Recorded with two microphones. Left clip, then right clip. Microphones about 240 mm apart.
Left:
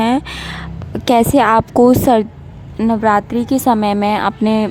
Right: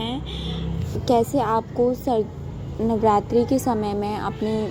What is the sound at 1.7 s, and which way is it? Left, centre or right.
Speech, left.